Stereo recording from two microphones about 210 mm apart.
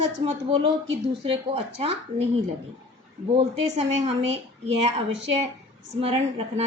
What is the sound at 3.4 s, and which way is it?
A woman's voice, 30° right (ahead or behind).